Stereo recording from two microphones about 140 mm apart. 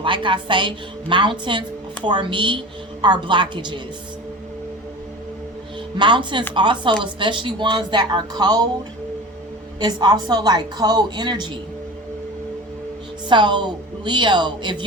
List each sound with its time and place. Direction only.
0.0 s a woman's voice: 35° right (ahead or behind)
6.0 s a woman's voice: 35° right (ahead or behind)
9.8 s a woman's voice: 30° right (ahead or behind)
13.2 s a woman's voice: 35° right (ahead or behind)